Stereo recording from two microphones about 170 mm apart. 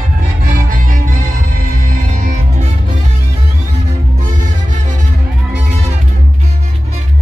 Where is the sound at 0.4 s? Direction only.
55° right (ahead or behind).